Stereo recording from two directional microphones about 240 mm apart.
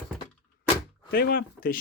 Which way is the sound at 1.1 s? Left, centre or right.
Left.